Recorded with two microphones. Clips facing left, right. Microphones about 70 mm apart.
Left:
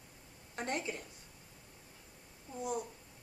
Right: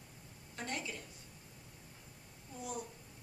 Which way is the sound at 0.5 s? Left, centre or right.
Left.